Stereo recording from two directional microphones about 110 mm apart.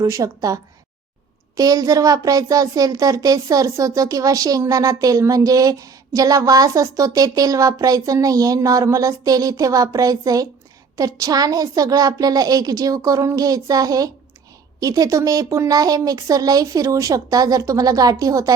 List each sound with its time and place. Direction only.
0.0 s speech: 30° right (ahead or behind)